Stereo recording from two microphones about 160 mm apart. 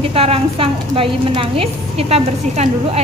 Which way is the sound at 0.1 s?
35° right (ahead or behind).